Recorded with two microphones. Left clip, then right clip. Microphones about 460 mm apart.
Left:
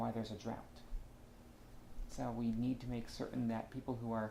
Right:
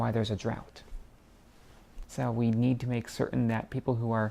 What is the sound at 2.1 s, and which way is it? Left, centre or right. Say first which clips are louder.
Speech: right 10 dB; right.